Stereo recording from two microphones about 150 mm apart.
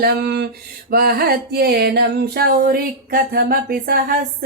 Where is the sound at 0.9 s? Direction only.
90° right.